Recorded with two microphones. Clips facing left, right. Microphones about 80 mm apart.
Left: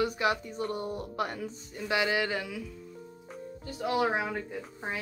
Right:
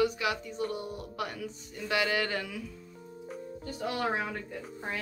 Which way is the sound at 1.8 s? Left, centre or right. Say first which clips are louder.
Left 1 dB; centre.